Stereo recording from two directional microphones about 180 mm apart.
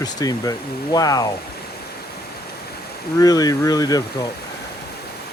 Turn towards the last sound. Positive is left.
turn(degrees=20)  # may be behind; listen again after turning